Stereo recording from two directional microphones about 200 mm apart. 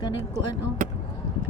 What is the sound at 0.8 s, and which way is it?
Chop, 40° right (ahead or behind).